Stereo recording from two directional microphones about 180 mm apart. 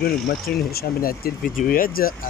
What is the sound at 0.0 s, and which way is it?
Speech, 60° left (ahead or behind).